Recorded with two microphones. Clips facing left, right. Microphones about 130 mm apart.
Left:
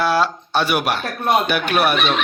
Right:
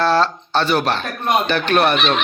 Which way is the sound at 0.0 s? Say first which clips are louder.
Right 2 dB; 10° left (ahead or behind).